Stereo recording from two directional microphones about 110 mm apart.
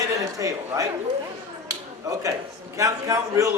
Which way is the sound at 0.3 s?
30° right (ahead or behind).